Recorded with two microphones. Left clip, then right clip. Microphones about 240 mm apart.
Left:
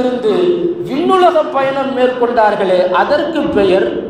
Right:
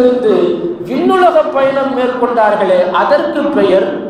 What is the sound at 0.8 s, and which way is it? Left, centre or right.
A man's voice, left.